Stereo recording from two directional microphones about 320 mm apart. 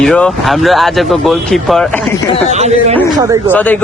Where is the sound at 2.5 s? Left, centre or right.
Right.